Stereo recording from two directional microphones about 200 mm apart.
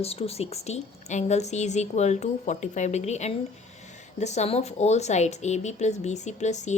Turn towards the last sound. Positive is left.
turn(degrees=35)  # may be behind; listen again after turning